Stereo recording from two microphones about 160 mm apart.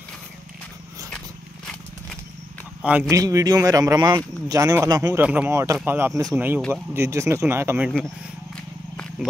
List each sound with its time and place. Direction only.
2.8 s speech: 5° right (ahead or behind)
3.1 s speech: 20° right (ahead or behind)
5.2 s speech: 10° right (ahead or behind)
8.5 s a sound: 5° left (ahead or behind)